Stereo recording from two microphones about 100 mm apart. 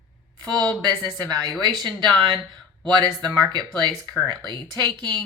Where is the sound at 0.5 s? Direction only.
45° right (ahead or behind).